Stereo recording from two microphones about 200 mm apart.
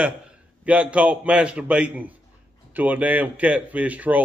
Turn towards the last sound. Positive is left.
turn(degrees=-5)  # may be behind; listen again after turning